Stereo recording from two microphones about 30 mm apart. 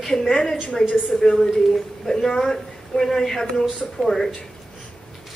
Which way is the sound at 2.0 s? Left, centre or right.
Centre.